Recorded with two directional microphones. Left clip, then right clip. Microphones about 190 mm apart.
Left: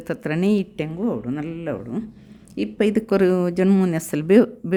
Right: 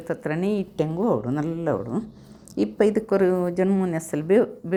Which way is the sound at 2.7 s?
15° left (ahead or behind).